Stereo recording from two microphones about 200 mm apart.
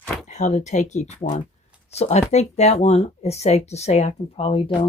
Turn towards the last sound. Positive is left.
turn(degrees=30)  # may be behind; listen again after turning